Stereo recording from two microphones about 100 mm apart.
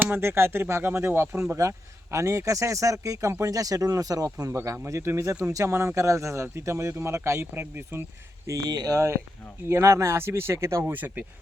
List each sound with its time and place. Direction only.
0.0 s speech: 20° right (ahead or behind)
8.4 s speech: 40° right (ahead or behind); by 11.3 s 15° right (ahead or behind)